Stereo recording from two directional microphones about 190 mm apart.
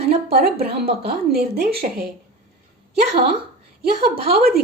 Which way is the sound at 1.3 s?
55° right (ahead or behind).